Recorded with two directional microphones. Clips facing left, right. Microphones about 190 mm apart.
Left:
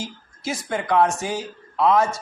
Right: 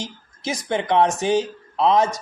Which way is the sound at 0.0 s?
20° right (ahead or behind).